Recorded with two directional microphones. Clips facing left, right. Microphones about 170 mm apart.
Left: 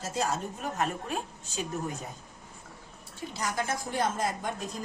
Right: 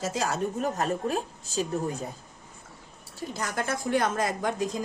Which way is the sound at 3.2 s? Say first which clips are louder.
Right 1 dB; 55° right (ahead or behind).